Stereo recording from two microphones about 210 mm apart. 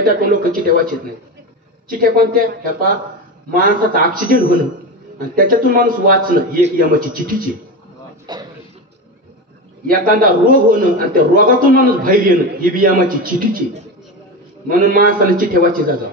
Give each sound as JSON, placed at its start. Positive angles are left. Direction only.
{"t": 0.3, "sound": "a man's voice", "side_deg": -40}
{"t": 1.9, "sound": "a man's voice", "side_deg": -45}
{"t": 8.3, "sound": "a sound", "side_deg": -20}
{"t": 9.8, "sound": "a man's voice", "side_deg": -40}
{"t": 14.7, "sound": "a man's voice", "side_deg": -45}